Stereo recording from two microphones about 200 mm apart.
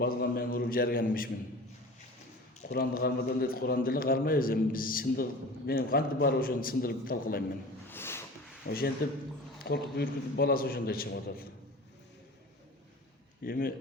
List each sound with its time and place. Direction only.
0.0 s a man's voice: 50° left (ahead or behind)
2.7 s a man's voice: 50° left (ahead or behind)
7.9 s a sound: 10° left (ahead or behind)
8.6 s a man's voice: 50° left (ahead or behind)
13.4 s a man's voice: 45° left (ahead or behind)